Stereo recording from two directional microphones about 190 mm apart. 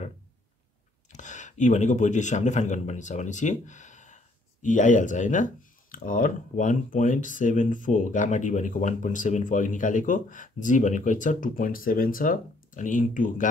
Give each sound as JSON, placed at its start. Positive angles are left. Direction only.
{"t": 1.1, "sound": "a man's voice", "side_deg": 40}